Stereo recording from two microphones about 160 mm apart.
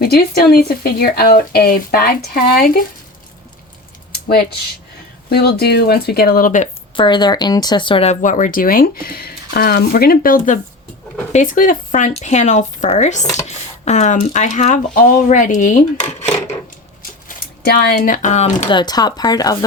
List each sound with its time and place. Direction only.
0.0 s speech: 75° left (ahead or behind)
4.3 s speech: 80° left; by 6.7 s 55° left (ahead or behind)
6.9 s speech: 30° left (ahead or behind); by 15.8 s 55° left (ahead or behind)
17.2 s speech: 70° left (ahead or behind); by 18.7 s 45° left (ahead or behind)
18.7 s speech: 25° left (ahead or behind)